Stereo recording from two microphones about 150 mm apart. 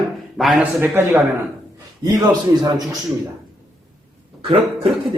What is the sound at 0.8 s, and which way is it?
Speech, 15° right (ahead or behind).